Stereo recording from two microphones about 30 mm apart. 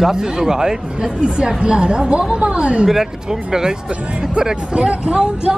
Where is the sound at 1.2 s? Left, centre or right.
Right.